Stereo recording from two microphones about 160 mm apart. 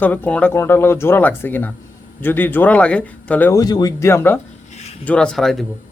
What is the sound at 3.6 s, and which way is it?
Speech, 25° left (ahead or behind).